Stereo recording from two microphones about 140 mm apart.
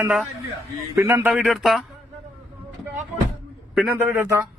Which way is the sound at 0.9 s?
15° right (ahead or behind).